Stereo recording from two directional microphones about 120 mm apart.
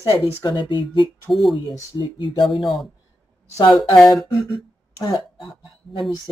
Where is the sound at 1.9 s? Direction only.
40° left (ahead or behind).